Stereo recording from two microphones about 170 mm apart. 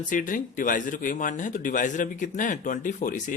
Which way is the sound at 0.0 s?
50° left (ahead or behind).